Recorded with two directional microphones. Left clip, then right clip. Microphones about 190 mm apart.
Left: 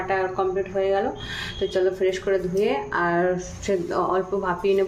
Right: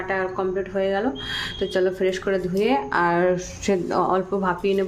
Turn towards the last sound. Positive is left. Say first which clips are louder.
# even
turn(degrees=-15)  # may be behind; listen again after turning